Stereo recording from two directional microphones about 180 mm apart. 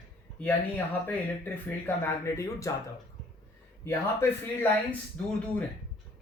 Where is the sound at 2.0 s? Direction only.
15° left (ahead or behind).